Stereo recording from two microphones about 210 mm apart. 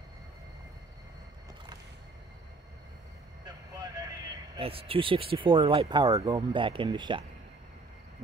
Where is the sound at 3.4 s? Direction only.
15° right (ahead or behind).